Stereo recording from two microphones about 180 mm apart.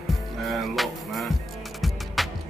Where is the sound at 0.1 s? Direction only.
Centre (ahead or behind).